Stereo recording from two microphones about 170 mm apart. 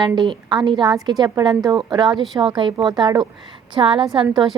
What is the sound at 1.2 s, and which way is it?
Speech, 20° right (ahead or behind).